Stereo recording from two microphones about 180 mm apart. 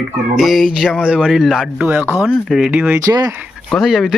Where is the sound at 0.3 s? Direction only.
Centre (ahead or behind).